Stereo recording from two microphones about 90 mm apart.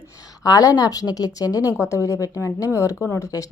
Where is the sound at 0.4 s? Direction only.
45° left (ahead or behind).